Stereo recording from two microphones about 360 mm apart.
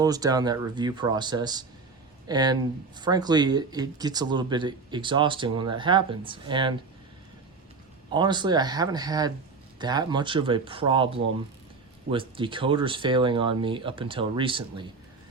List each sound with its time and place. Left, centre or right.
0.0 s speech: centre
8.1 s speech: centre